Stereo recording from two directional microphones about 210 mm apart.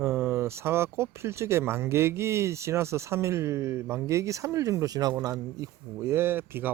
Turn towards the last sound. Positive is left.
turn(degrees=-10)  # may be behind; listen again after turning